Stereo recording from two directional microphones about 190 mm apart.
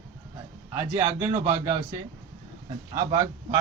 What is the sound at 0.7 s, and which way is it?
A man's voice, 15° right (ahead or behind).